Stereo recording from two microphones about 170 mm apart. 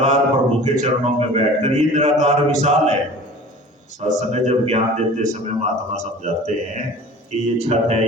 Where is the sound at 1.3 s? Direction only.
40° right (ahead or behind).